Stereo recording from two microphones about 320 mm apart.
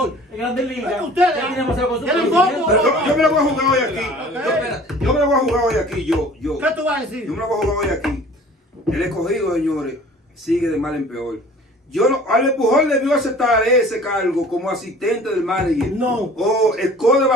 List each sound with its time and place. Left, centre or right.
1.1 s a man's voice: centre